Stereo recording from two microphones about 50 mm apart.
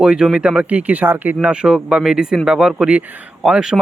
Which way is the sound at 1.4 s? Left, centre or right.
Centre.